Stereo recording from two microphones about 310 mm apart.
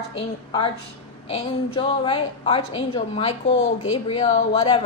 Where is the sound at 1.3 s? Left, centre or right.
Centre.